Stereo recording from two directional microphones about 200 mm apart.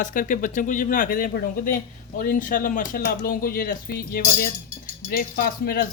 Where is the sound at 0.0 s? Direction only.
40° left (ahead or behind).